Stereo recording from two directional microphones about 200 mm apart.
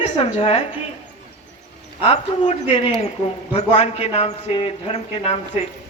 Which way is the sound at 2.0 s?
30° left (ahead or behind).